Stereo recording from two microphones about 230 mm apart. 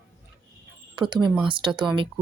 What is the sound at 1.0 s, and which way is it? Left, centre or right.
Speech, centre.